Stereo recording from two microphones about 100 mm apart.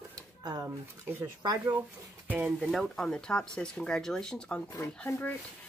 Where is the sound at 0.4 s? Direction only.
45° right (ahead or behind).